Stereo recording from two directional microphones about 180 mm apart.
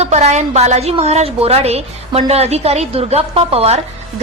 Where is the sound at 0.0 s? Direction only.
40° right (ahead or behind).